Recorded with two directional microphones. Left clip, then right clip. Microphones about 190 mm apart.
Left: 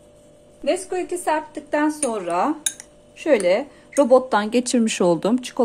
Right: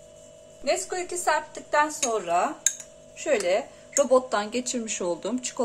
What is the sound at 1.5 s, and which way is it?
Speech, 25° left (ahead or behind).